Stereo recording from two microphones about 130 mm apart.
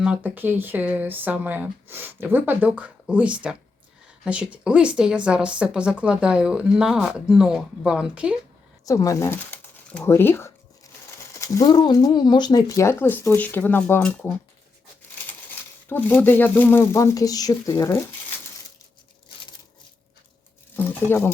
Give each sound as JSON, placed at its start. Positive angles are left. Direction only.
{"t": 0.0, "sound": "speech", "side_deg": -10}
{"t": 8.9, "sound": "speech", "side_deg": 25}
{"t": 15.9, "sound": "speech", "side_deg": 15}
{"t": 20.7, "sound": "a sound", "side_deg": 15}